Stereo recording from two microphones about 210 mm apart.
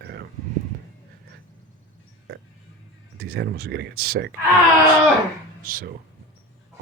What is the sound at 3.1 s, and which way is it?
Speech, 45° right (ahead or behind).